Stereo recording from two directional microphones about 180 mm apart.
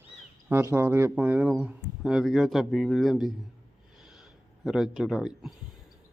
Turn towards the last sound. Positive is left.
turn(degrees=0)  # may be behind; listen again after turning